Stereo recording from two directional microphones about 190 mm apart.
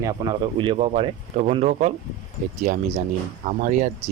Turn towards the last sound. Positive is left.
turn(degrees=-40)  # may be behind; listen again after turning